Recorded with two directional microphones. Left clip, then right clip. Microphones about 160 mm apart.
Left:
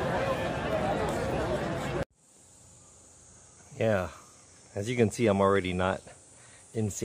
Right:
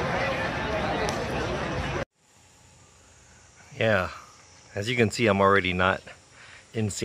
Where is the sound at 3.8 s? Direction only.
10° left (ahead or behind).